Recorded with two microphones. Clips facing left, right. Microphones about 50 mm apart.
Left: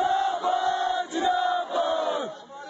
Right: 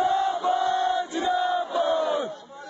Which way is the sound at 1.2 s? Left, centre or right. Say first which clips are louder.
Even; right.